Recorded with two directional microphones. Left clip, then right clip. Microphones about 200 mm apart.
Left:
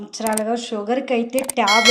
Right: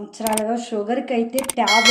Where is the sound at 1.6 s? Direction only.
Centre (ahead or behind).